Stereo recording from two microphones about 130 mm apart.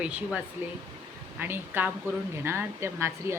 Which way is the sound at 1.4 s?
15° right (ahead or behind).